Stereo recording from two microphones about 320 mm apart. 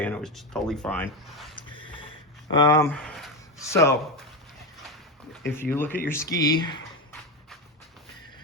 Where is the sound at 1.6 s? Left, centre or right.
Centre.